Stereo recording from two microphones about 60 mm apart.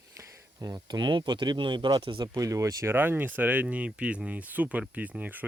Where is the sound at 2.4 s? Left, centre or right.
Right.